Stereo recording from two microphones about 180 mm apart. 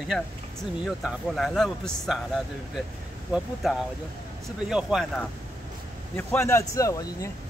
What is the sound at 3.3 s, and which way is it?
Speech, centre (ahead or behind).